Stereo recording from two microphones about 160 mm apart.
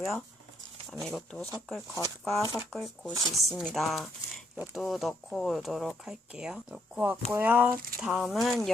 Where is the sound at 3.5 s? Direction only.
Centre (ahead or behind).